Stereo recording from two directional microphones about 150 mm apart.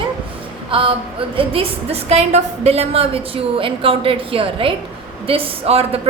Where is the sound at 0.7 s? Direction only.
35° right (ahead or behind).